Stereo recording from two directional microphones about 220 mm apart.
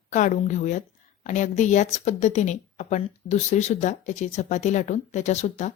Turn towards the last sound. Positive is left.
turn(degrees=30)  # may be behind; listen again after turning